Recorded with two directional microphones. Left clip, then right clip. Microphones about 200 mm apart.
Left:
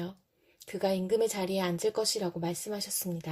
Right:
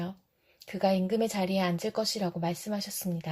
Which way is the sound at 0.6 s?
35° left (ahead or behind).